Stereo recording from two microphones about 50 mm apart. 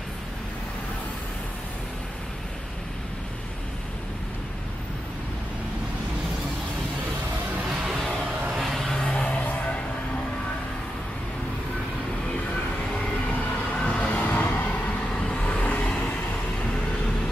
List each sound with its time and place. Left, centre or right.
8.6 s a sound: centre
8.9 s music: centre
13.7 s vehicle: left